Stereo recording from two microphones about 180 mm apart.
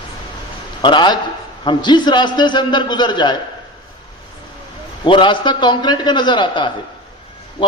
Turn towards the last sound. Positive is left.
turn(degrees=25)  # may be behind; listen again after turning